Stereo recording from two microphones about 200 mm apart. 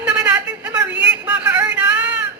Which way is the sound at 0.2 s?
10° right (ahead or behind).